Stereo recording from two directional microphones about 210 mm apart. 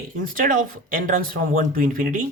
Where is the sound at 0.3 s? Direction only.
40° right (ahead or behind).